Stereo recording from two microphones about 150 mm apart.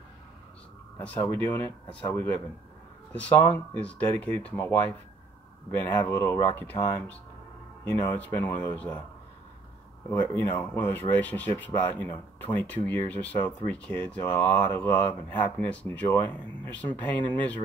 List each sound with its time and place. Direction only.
0.9 s speech: 10° left (ahead or behind)
10.0 s speech: 10° left (ahead or behind)